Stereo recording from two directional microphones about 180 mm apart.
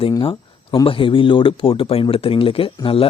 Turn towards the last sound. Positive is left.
turn(degrees=30)  # may be behind; listen again after turning